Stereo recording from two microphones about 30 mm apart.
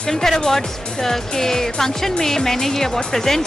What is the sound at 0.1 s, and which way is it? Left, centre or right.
Speech, centre.